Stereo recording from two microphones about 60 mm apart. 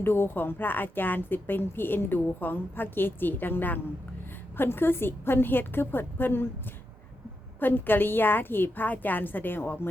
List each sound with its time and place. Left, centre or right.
0.0 s a woman's voice: left
7.6 s a woman's voice: left